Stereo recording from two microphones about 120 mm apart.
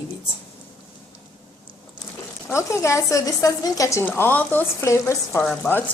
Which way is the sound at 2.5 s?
25° left (ahead or behind).